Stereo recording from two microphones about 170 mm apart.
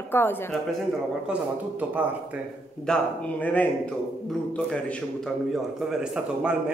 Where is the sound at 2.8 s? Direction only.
5° left (ahead or behind).